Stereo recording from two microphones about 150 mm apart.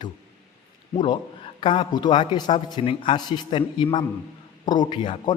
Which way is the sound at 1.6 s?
35° left (ahead or behind).